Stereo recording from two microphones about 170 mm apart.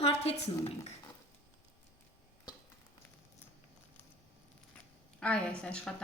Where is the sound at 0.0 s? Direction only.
35° left (ahead or behind).